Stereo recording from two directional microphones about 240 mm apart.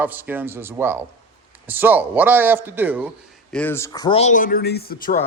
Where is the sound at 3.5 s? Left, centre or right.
Centre; by 5.1 s left.